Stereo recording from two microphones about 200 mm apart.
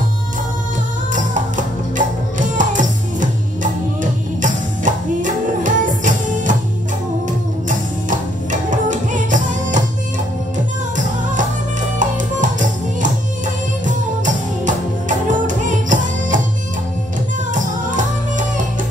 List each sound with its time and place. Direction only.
2.0 s music: 40° right (ahead or behind)
4.4 s music: 40° right (ahead or behind)
12.0 s music: 40° right (ahead or behind)